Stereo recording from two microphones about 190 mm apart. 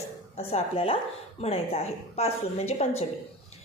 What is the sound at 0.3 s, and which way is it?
A woman's voice, 30° left (ahead or behind).